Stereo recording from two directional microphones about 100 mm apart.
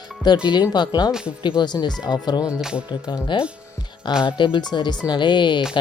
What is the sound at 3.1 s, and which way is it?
Speech, 55° left (ahead or behind).